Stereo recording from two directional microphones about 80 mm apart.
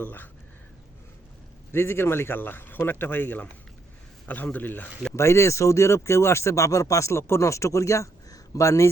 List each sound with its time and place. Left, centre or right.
0.0 s speech: left
1.7 s speech: left
5.1 s speech: left